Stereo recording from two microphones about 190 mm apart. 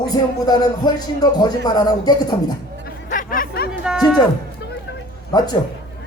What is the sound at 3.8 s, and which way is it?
Speech, 5° right (ahead or behind).